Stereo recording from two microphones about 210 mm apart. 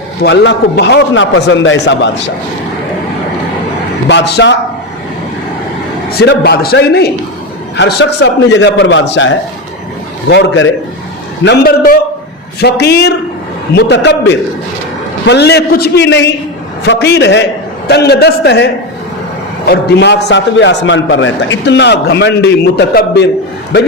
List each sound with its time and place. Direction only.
0.2 s a man's voice: 55° left (ahead or behind)
4.1 s a man's voice: 55° left (ahead or behind)
6.1 s a man's voice: 50° left (ahead or behind)